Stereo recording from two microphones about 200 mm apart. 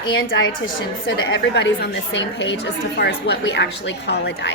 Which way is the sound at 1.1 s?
60° left (ahead or behind).